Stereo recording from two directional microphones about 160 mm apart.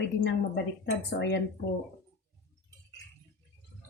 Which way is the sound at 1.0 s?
90° left.